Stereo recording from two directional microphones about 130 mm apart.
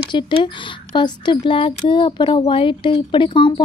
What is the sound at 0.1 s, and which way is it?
Speech, 40° left (ahead or behind).